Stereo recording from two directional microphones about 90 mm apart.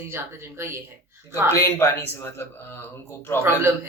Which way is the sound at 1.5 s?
30° left (ahead or behind).